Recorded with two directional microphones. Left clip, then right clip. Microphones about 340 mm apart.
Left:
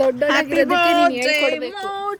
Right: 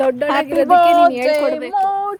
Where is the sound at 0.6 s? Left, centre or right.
Right.